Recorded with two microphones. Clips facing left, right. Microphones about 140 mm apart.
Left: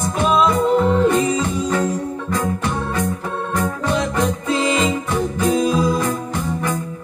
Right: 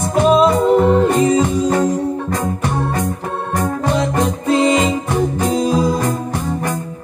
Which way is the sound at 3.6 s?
35° right (ahead or behind).